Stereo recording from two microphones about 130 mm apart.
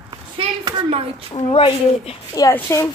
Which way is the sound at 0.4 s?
45° right (ahead or behind).